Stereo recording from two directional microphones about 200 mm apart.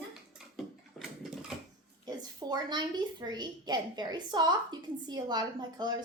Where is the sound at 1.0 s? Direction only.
Centre (ahead or behind).